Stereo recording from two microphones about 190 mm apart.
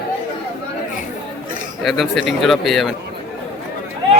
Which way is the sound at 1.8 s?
Centre (ahead or behind).